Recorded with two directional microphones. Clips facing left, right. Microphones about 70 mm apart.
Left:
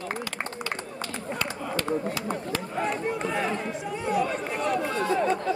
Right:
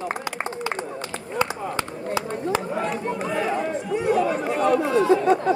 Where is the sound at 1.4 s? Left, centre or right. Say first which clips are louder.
Right 7 dB; right.